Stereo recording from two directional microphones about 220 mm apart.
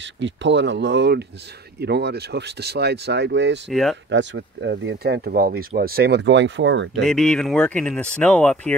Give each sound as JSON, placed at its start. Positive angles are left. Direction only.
{"t": 0.0, "sound": "speech", "side_deg": -55}
{"t": 3.7, "sound": "speech", "side_deg": 0}
{"t": 4.1, "sound": "speech", "side_deg": -55}
{"t": 7.0, "sound": "speech", "side_deg": 0}